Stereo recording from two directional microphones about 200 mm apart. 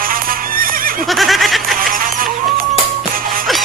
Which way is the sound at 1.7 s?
45° right (ahead or behind).